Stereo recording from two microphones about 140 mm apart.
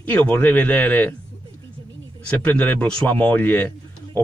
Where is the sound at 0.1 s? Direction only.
15° left (ahead or behind).